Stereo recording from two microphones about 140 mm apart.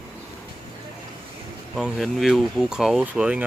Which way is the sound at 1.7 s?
Centre (ahead or behind).